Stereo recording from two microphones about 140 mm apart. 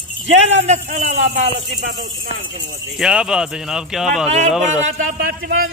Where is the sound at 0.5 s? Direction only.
55° right (ahead or behind).